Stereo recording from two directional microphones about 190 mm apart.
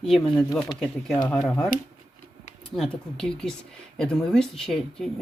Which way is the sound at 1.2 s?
Centre (ahead or behind).